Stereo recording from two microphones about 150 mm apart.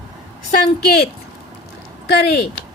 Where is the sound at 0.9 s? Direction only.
90° left.